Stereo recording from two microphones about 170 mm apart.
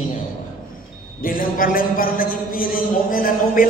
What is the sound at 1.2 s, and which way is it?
A man's voice, 55° left (ahead or behind).